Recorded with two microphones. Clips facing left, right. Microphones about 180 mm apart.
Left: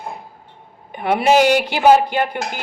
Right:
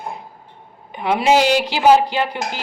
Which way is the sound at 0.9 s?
55° left (ahead or behind).